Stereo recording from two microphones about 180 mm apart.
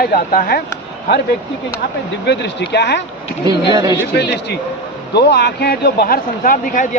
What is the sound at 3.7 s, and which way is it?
Speech, 20° right (ahead or behind).